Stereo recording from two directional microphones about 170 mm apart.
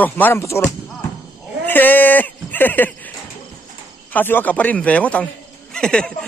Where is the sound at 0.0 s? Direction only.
10° left (ahead or behind).